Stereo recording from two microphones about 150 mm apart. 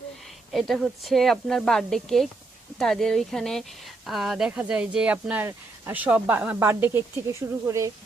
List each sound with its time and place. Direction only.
0.7 s speech: centre (ahead or behind); by 7.9 s 20° right (ahead or behind)